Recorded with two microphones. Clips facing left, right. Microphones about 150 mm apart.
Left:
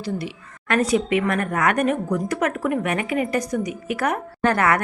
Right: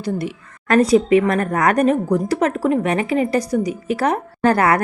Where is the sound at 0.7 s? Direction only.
35° right (ahead or behind).